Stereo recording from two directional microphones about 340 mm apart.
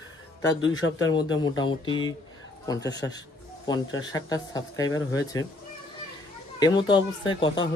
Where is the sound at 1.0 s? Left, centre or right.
Centre.